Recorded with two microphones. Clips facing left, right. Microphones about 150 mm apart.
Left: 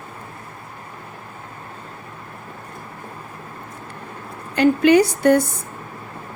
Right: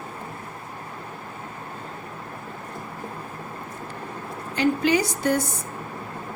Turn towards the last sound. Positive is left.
turn(degrees=60)  # may be behind; listen again after turning